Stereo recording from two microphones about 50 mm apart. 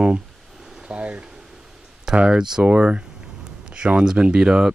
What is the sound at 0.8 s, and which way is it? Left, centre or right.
Boiling, right.